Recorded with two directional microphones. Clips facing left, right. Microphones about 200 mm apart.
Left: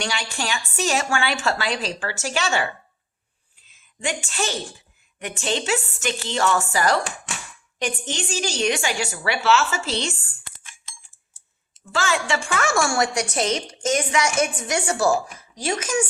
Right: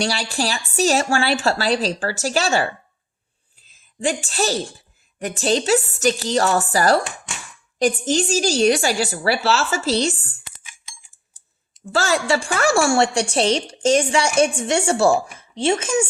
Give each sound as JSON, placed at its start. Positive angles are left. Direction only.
{"t": 0.0, "sound": "a woman's voice", "side_deg": -35}
{"t": 3.7, "sound": "a woman's voice", "side_deg": -35}
{"t": 11.9, "sound": "a woman's voice", "side_deg": -35}